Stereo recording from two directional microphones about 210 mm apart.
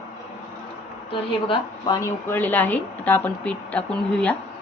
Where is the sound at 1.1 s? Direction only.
20° left (ahead or behind).